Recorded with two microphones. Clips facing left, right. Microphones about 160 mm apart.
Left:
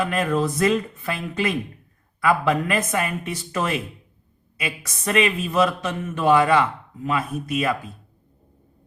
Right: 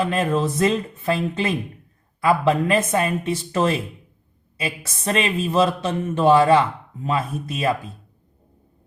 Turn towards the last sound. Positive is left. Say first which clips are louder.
# even
turn(degrees=-30)  # may be behind; listen again after turning